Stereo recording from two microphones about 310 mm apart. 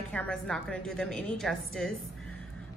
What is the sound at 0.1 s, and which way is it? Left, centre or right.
A woman's voice, centre.